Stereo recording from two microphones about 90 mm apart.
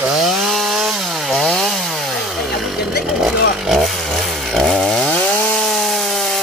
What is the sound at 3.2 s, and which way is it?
Chainsaw, 5° right (ahead or behind).